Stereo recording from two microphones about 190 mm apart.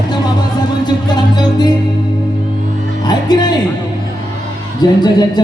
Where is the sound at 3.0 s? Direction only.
20° left (ahead or behind).